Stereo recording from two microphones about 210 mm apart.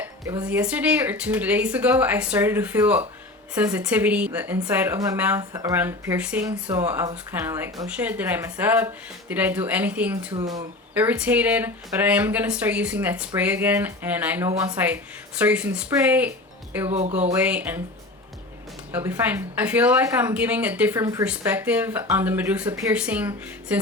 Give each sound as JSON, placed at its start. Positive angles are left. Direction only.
{"t": 0.0, "sound": "speech", "side_deg": -10}
{"t": 10.3, "sound": "speech", "side_deg": -15}
{"t": 16.9, "sound": "speech", "side_deg": -30}
{"t": 17.3, "sound": "speech", "side_deg": -5}
{"t": 18.9, "sound": "speech", "side_deg": -10}